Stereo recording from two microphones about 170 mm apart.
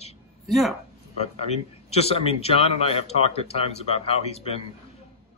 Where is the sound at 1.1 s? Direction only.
40° left (ahead or behind).